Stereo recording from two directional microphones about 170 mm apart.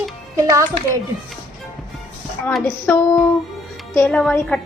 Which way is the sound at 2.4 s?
10° left (ahead or behind).